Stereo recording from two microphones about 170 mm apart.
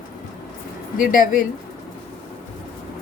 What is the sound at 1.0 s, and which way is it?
Speech, 55° left (ahead or behind).